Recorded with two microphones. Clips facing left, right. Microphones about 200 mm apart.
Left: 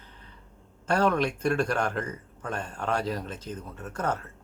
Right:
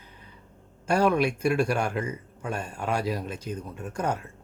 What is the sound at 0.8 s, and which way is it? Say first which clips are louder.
Speech: right 2 dB; 10° right (ahead or behind).